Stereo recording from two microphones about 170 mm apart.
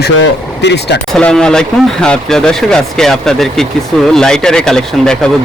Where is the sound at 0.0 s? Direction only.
90° left.